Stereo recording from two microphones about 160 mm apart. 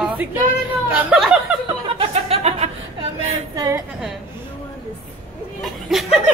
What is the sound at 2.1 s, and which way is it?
Music, 40° right (ahead or behind).